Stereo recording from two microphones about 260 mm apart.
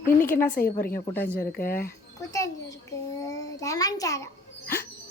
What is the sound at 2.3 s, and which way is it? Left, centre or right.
A child's voice, centre.